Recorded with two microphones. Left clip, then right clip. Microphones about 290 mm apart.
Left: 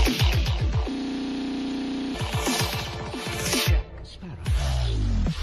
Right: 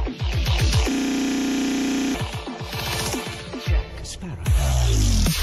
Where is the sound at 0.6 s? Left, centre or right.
Right.